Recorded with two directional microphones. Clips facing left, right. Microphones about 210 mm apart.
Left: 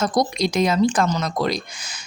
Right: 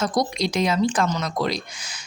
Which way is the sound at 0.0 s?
45° left (ahead or behind).